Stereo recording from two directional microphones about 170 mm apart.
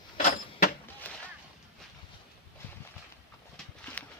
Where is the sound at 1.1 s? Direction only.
10° left (ahead or behind).